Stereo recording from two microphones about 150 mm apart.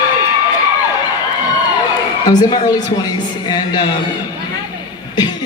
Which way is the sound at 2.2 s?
25° left (ahead or behind).